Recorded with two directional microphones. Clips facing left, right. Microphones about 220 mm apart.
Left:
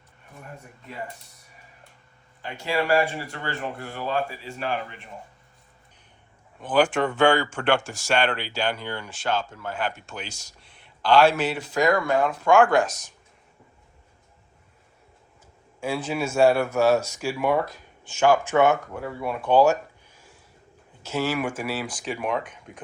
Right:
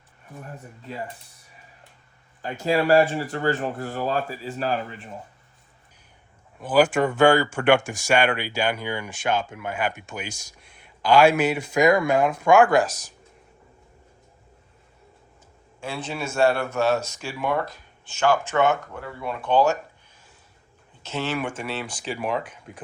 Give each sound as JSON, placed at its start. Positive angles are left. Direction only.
{"t": 2.4, "sound": "speech", "side_deg": -45}
{"t": 6.6, "sound": "speech", "side_deg": -5}
{"t": 12.9, "sound": "speech", "side_deg": -35}
{"t": 15.8, "sound": "speech", "side_deg": 10}
{"t": 21.0, "sound": "speech", "side_deg": 10}